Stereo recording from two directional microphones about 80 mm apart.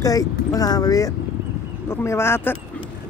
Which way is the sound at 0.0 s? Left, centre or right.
Left.